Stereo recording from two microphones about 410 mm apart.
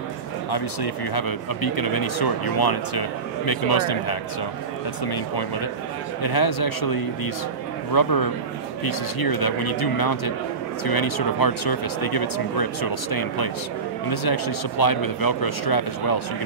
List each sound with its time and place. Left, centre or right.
0.5 s speech: left